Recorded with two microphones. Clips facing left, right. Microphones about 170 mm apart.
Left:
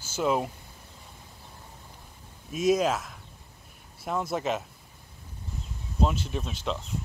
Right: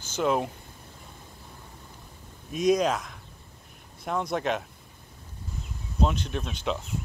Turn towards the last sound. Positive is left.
turn(degrees=0)  # may be behind; listen again after turning